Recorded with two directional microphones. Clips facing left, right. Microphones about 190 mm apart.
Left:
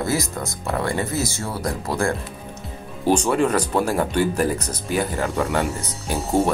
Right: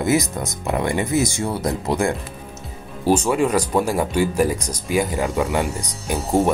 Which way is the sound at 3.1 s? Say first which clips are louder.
Right 1 dB; 10° right (ahead or behind).